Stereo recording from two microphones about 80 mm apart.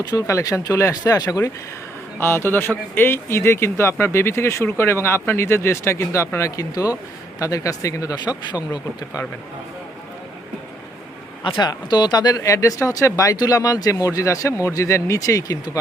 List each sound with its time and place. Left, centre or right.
0.0 s speech: left
0.3 s speech: left
2.1 s speech: left
8.1 s speech: left
11.4 s speech: left
11.7 s speech: left